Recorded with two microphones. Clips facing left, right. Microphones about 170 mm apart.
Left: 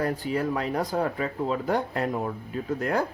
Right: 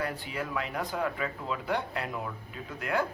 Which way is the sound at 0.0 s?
40° left (ahead or behind).